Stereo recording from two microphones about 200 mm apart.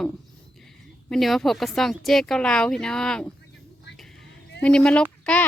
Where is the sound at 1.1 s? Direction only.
Centre (ahead or behind).